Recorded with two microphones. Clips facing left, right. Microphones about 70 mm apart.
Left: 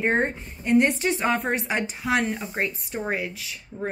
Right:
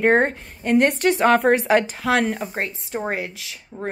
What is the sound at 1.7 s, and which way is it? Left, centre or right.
Speech, right.